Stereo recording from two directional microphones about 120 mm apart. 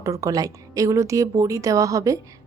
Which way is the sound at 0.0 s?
25° right (ahead or behind).